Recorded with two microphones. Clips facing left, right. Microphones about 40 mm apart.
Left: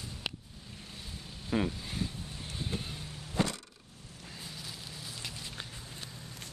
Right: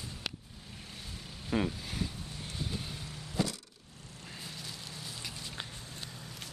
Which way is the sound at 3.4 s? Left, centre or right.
Left.